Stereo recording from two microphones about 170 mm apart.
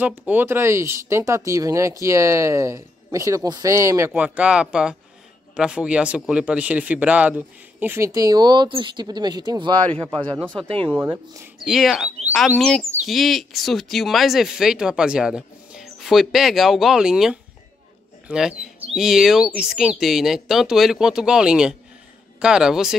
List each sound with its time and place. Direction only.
0.0 s speech: 10° right (ahead or behind); by 9.8 s 25° right (ahead or behind)
11.6 s speech: centre (ahead or behind)